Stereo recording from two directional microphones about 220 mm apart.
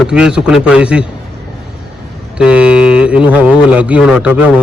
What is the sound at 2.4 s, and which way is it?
Speech, 5° right (ahead or behind).